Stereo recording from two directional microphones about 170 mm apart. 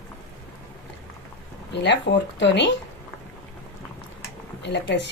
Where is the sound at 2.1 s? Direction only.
90° left.